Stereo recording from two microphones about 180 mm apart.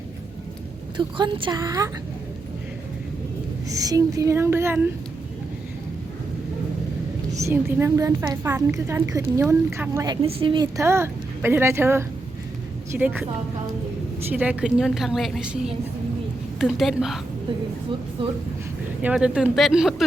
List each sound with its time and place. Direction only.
0.9 s a woman's voice: 25° right (ahead or behind)
3.7 s a woman's voice: 20° right (ahead or behind)
7.3 s a woman's voice: 15° right (ahead or behind)
10.2 s a woman's voice: 30° right (ahead or behind); by 13.2 s 10° right (ahead or behind)
14.3 s a woman's voice: 10° right (ahead or behind)
19.0 s a woman's voice: 5° right (ahead or behind)